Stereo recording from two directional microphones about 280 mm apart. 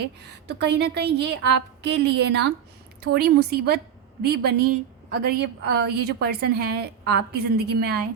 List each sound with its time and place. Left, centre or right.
0.0 s a woman's voice: right